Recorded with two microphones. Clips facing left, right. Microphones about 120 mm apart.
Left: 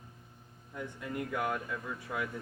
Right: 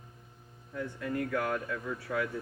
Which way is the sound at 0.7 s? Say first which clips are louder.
Right 4 dB; 20° left (ahead or behind).